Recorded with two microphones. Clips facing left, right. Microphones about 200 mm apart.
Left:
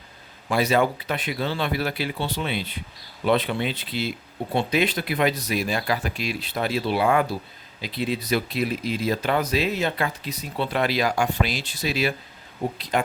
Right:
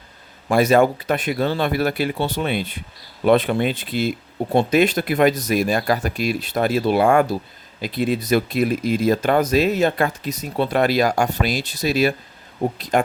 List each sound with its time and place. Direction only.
0.4 s speech: 45° right (ahead or behind)